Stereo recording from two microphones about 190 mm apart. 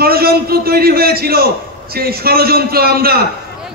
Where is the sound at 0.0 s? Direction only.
55° right (ahead or behind).